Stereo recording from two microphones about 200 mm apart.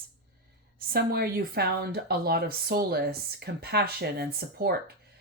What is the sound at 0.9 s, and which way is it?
Speech, 50° right (ahead or behind).